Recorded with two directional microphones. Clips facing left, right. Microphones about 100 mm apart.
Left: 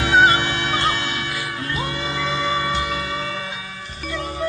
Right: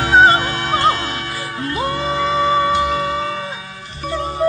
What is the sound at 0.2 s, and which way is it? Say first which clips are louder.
Music: right 4 dB; 35° right (ahead or behind).